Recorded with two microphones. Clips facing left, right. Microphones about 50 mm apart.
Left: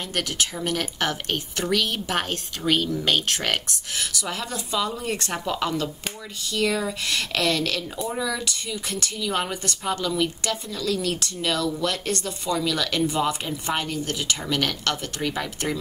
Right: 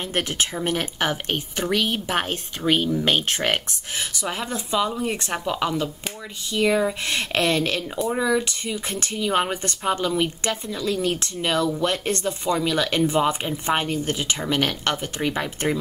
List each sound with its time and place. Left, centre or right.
0.1 s speech: right